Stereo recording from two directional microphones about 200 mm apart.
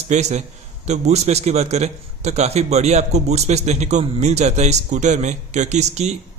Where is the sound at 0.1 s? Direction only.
35° right (ahead or behind).